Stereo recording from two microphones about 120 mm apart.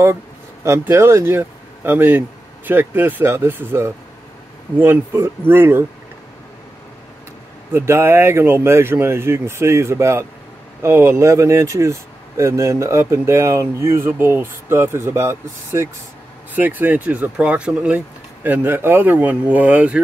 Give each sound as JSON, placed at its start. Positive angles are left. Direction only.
{"t": 0.7, "sound": "speech", "side_deg": -25}
{"t": 7.7, "sound": "speech", "side_deg": -20}